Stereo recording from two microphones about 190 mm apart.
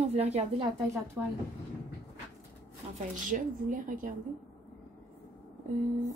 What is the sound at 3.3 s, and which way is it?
Speech, 45° right (ahead or behind).